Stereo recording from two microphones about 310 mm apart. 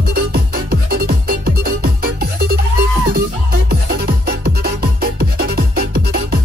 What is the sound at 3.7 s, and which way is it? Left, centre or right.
Music, right.